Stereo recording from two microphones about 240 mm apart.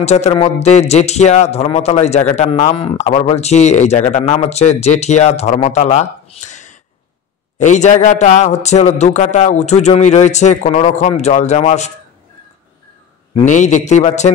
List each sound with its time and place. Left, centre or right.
0.0 s speech: left
13.5 s speech: left